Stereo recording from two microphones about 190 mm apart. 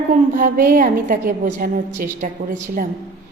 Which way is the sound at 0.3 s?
45° right (ahead or behind).